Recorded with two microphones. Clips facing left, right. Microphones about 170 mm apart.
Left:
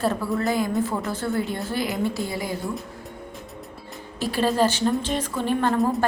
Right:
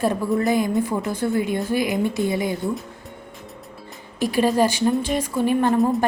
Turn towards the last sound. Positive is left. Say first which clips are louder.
# right 4 dB
turn(degrees=-15)  # may be behind; listen again after turning